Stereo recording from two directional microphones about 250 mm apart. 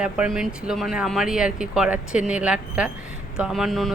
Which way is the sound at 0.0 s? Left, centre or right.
Centre.